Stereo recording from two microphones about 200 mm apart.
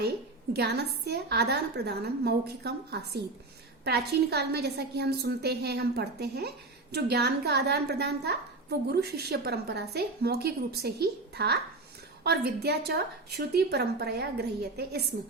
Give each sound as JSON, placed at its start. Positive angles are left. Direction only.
{"t": 0.5, "sound": "a woman's voice", "side_deg": -55}